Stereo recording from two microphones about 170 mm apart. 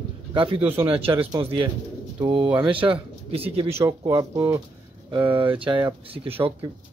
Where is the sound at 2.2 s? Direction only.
30° right (ahead or behind).